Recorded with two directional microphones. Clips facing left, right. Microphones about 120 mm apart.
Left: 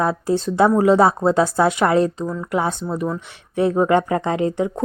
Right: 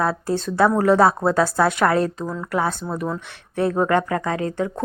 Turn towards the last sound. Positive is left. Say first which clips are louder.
# left 3 dB
turn(degrees=20)  # may be behind; listen again after turning